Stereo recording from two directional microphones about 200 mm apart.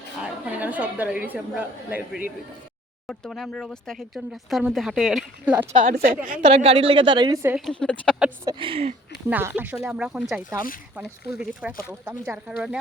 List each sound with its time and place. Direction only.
0.2 s a woman's voice: 5° right (ahead or behind)
5.7 s a woman's voice: 45° right (ahead or behind)
6.2 s a woman's voice: 30° right (ahead or behind)
7.5 s speech: 5° left (ahead or behind)
8.4 s a woman's voice: 25° right (ahead or behind)
9.3 s speech: 10° right (ahead or behind)